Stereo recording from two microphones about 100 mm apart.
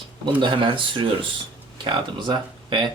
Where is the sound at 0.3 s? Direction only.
55° right (ahead or behind).